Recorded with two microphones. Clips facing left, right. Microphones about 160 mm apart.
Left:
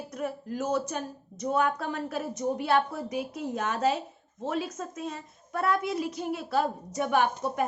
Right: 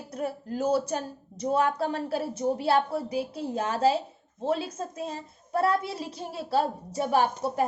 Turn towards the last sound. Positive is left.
turn(degrees=-30)  # may be behind; listen again after turning